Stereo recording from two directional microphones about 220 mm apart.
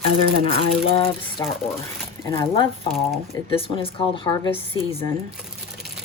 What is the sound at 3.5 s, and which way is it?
Speech, 25° left (ahead or behind).